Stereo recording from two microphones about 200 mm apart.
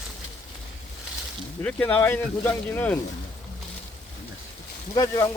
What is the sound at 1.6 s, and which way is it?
Speech, 10° left (ahead or behind).